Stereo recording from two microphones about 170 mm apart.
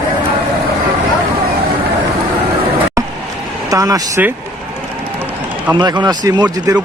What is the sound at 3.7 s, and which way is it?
Speech, 20° right (ahead or behind).